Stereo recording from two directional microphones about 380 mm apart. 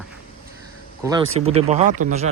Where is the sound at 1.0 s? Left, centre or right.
Centre.